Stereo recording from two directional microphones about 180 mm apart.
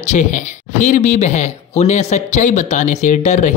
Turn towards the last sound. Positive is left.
turn(degrees=40)  # may be behind; listen again after turning